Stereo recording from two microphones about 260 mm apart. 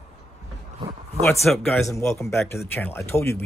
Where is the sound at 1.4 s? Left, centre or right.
Centre.